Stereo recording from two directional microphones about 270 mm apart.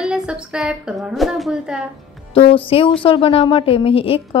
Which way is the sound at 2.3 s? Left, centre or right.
Centre.